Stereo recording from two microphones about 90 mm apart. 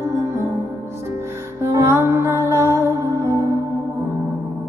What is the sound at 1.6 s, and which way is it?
Music, 30° right (ahead or behind).